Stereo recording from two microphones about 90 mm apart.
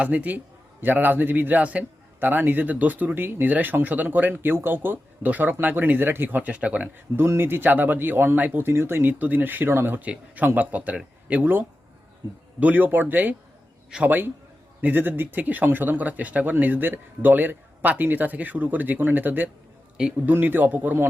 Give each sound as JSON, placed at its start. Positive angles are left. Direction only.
{"t": 0.0, "sound": "speech", "side_deg": -15}
{"t": 7.3, "sound": "a man's voice", "side_deg": -25}
{"t": 20.0, "sound": "a man's voice", "side_deg": -10}
{"t": 20.3, "sound": "speech", "side_deg": -20}